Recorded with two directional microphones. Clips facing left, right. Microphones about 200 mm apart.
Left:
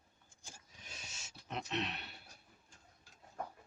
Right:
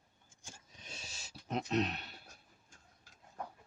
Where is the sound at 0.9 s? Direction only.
30° right (ahead or behind).